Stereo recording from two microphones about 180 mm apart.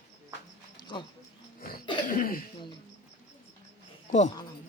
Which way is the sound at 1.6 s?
55° left (ahead or behind).